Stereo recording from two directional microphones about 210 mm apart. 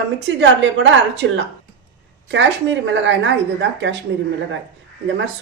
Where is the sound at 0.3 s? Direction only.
60° right (ahead or behind).